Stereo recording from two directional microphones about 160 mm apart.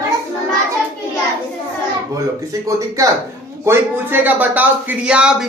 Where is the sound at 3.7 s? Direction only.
10° right (ahead or behind).